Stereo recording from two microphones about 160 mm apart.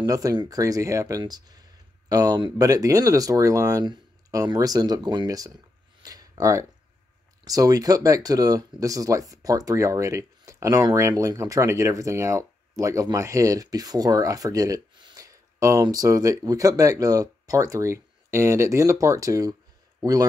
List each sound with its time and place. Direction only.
0.0 s speech: 25° right (ahead or behind)
6.0 s a sound: 20° right (ahead or behind)
7.4 s speech: 20° right (ahead or behind)